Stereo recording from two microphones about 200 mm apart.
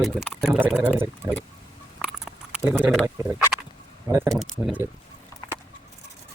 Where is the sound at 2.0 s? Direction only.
5° right (ahead or behind).